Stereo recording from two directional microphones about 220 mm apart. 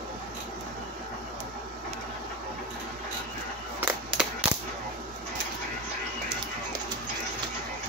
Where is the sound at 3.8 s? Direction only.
10° right (ahead or behind).